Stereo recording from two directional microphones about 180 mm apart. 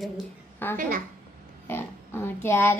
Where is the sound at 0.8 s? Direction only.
55° right (ahead or behind).